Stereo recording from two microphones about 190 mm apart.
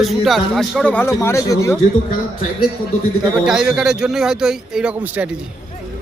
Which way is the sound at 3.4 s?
5° right (ahead or behind).